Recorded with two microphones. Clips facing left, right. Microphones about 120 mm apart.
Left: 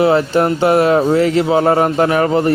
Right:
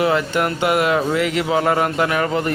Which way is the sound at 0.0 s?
30° left (ahead or behind).